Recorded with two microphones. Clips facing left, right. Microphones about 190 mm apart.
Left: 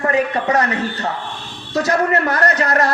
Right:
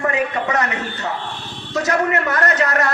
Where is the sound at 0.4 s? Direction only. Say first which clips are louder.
Left 3 dB; 35° left (ahead or behind).